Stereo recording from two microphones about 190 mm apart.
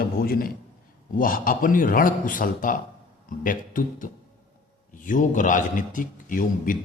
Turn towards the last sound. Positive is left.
turn(degrees=45)  # may be behind; listen again after turning